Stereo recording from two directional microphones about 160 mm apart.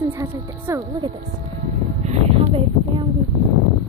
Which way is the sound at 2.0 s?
40° right (ahead or behind).